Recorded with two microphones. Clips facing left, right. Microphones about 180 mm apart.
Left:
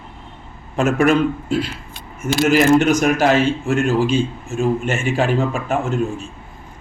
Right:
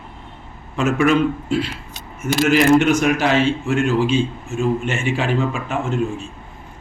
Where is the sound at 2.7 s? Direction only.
40° left (ahead or behind).